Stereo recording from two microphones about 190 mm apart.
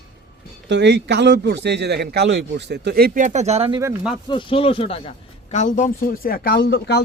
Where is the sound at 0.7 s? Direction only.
65° right (ahead or behind); by 3.8 s 35° right (ahead or behind).